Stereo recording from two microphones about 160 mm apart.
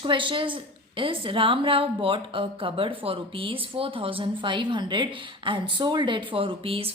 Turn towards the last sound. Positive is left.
turn(degrees=-35)  # may be behind; listen again after turning